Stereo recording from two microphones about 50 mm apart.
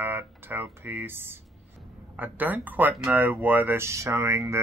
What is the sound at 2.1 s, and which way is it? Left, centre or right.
Speech, right.